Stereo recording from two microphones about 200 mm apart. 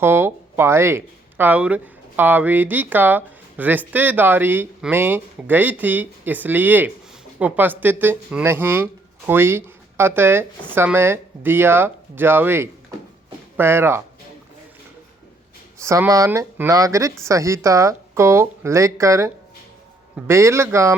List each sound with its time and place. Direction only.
0.0 s speech: 10° right (ahead or behind)
15.8 s speech: 15° right (ahead or behind)